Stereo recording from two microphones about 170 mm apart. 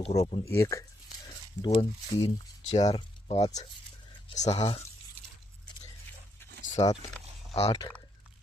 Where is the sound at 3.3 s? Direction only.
40° left (ahead or behind).